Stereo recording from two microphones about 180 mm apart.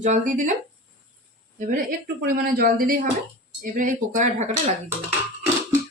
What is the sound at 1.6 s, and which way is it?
Speech, 50° right (ahead or behind).